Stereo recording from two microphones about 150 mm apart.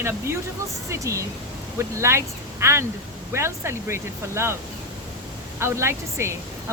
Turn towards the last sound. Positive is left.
turn(degrees=-20)  # may be behind; listen again after turning